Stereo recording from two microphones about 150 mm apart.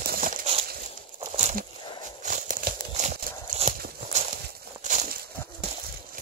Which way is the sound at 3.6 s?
55° right (ahead or behind).